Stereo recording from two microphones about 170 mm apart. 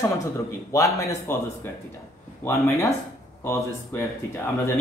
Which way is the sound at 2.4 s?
15° left (ahead or behind).